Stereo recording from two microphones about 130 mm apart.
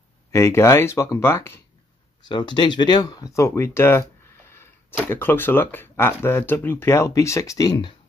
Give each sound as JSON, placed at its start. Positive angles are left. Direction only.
{"t": 0.3, "sound": "speech", "side_deg": 20}
{"t": 2.2, "sound": "speech", "side_deg": 35}
{"t": 5.0, "sound": "speech", "side_deg": 15}